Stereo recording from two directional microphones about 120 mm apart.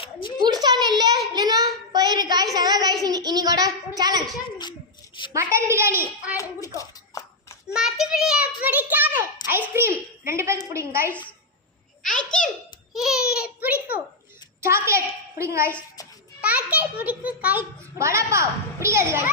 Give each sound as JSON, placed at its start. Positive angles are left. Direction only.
{"t": 0.0, "sound": "a sound", "side_deg": 45}
{"t": 0.6, "sound": "a sound", "side_deg": -35}
{"t": 1.3, "sound": "child singing", "side_deg": -35}
{"t": 5.3, "sound": "a woman's voice", "side_deg": -20}
{"t": 6.3, "sound": "a child's voice", "side_deg": 25}
{"t": 7.7, "sound": "a child's voice", "side_deg": 0}
{"t": 12.0, "sound": "a child's voice", "side_deg": 5}
{"t": 16.4, "sound": "a child's voice", "side_deg": -10}
{"t": 17.9, "sound": "a woman's voice", "side_deg": -25}